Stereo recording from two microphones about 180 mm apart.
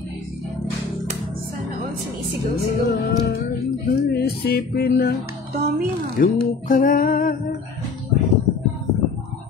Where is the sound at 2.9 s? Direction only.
65° left (ahead or behind).